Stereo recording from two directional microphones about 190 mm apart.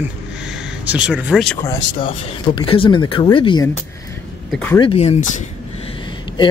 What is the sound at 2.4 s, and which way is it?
Speech, 25° left (ahead or behind).